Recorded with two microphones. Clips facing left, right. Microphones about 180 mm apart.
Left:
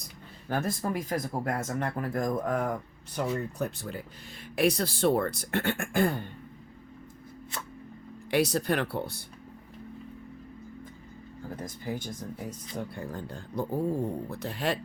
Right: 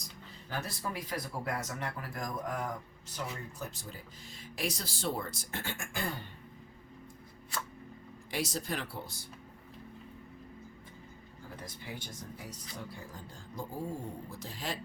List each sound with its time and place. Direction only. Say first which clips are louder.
0.0 s speech: left 2 dB; 50° left (ahead or behind)
8.3 s speech: left 10 dB; 65° left (ahead or behind)
11.6 s speech: left 10 dB; 45° left (ahead or behind); by 14.8 s 65° left (ahead or behind)